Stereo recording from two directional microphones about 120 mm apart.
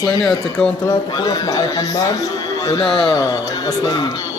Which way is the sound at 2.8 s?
Centre (ahead or behind).